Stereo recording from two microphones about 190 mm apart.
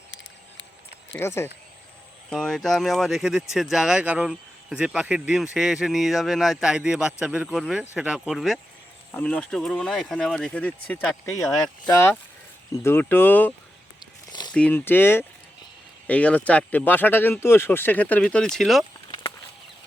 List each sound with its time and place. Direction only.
1.1 s speech: 15° left (ahead or behind)
2.3 s speech: centre (ahead or behind)
11.3 s speech: 15° left (ahead or behind)
12.7 s speech: 15° left (ahead or behind)
14.0 s a sound: 20° left (ahead or behind)
14.5 s speech: 10° left (ahead or behind)